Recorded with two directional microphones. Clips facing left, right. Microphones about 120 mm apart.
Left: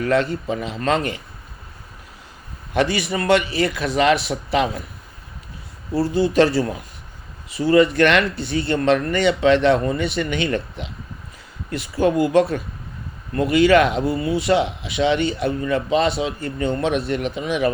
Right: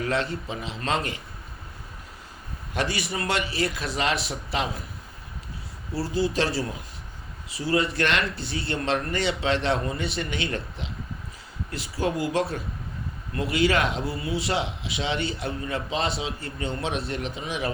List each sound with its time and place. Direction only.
0.0 s speech: 50° left (ahead or behind)
2.7 s speech: 65° left (ahead or behind)
5.9 s speech: 55° left (ahead or behind)